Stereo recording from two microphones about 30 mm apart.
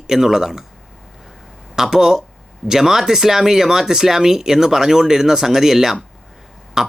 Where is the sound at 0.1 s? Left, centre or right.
Centre.